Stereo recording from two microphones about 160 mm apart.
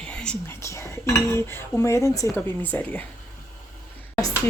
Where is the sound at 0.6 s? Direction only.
20° left (ahead or behind).